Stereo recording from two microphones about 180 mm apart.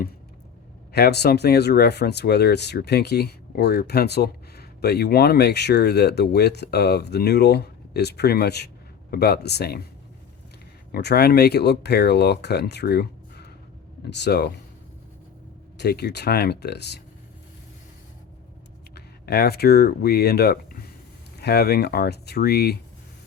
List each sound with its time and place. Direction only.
0.9 s speech: 65° left (ahead or behind)
10.9 s speech: 65° left (ahead or behind)
15.8 s speech: 65° left (ahead or behind)
18.9 s speech: 60° left (ahead or behind)